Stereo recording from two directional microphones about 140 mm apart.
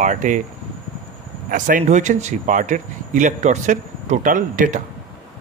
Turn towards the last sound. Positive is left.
turn(degrees=-70)  # may be behind; listen again after turning